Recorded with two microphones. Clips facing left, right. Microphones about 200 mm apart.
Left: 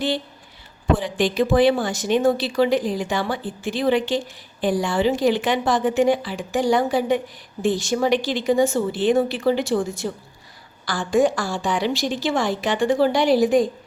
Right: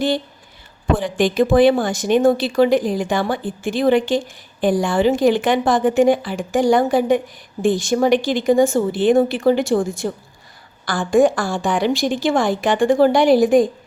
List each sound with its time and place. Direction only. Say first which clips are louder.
0.9 s speech: right 5 dB; 50° right (ahead or behind)